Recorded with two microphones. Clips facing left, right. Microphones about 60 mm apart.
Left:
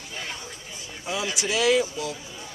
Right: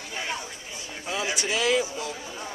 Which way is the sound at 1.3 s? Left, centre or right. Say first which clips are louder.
Left 3 dB; centre.